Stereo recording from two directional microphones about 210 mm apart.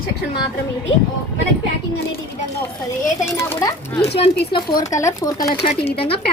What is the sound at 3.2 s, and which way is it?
Speech, 10° left (ahead or behind).